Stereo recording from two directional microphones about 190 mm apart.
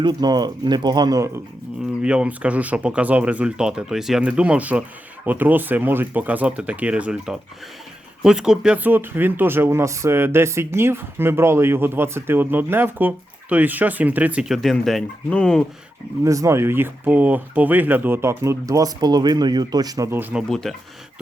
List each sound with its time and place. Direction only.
0.0 s speech: 20° right (ahead or behind)
2.0 s speech: 5° right (ahead or behind)
16.2 s speech: 15° right (ahead or behind)
20.5 s speech: centre (ahead or behind)